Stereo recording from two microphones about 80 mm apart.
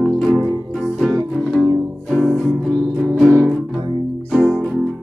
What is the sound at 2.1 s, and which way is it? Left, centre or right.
Music, centre.